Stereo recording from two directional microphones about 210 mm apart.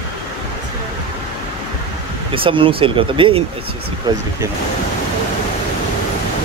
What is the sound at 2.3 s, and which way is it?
Speech, 25° right (ahead or behind).